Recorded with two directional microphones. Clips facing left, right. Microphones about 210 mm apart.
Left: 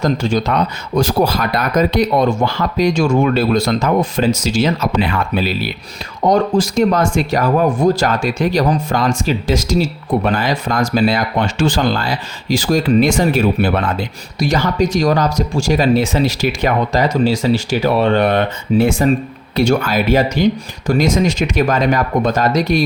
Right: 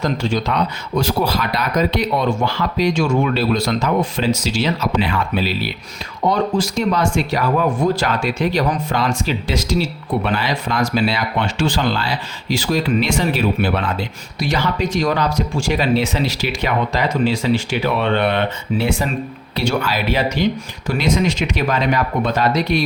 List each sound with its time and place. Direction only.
0.0 s speech: 45° left (ahead or behind)